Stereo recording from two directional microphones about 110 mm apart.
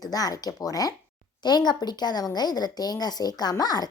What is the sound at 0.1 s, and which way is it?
A woman's voice, 35° left (ahead or behind).